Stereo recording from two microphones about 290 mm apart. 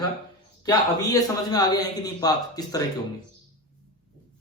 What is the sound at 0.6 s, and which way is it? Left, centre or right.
A man's voice, centre.